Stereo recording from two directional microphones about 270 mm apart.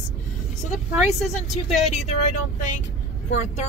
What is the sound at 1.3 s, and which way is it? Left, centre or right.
Speech, left.